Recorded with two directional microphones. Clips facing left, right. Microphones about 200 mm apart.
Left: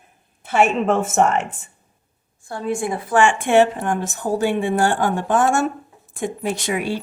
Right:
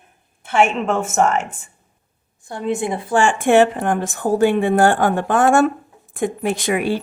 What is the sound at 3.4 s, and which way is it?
A woman's voice, 50° right (ahead or behind).